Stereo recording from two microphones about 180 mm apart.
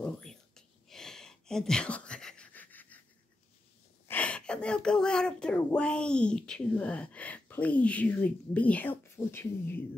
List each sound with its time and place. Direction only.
0.0 s whispering: 5° left (ahead or behind)
4.1 s a woman's voice: 5° left (ahead or behind)